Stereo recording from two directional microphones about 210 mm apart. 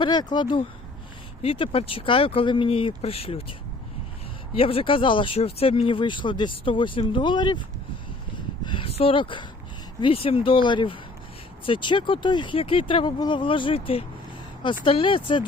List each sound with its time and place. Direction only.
0.0 s speech: 20° left (ahead or behind)
4.5 s speech: 25° left (ahead or behind)
8.6 s speech: 25° left (ahead or behind)